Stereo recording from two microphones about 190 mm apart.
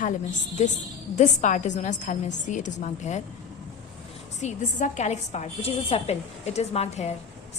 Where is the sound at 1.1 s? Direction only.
40° left (ahead or behind).